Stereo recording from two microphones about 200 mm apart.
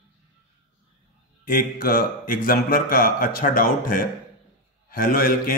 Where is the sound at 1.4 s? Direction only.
45° left (ahead or behind).